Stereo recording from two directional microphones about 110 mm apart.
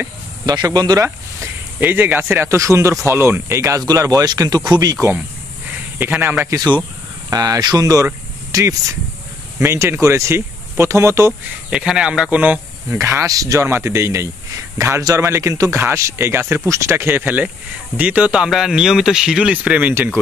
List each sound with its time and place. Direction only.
0.5 s speech: 35° right (ahead or behind)
1.0 s speech: 20° right (ahead or behind); by 4.9 s 40° right (ahead or behind)
6.4 s speech: 30° right (ahead or behind)
11.7 s speech: 10° right (ahead or behind)
13.0 s speech: 25° right (ahead or behind)